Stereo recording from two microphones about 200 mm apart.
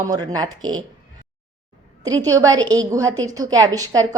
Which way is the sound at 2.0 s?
15° right (ahead or behind).